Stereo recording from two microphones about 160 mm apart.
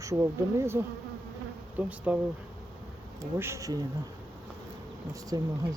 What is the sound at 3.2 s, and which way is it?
Speech, 20° right (ahead or behind).